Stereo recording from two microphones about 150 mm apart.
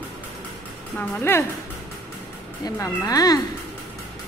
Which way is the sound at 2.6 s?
20° left (ahead or behind).